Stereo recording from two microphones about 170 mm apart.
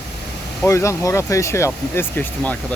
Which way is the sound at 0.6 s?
15° left (ahead or behind).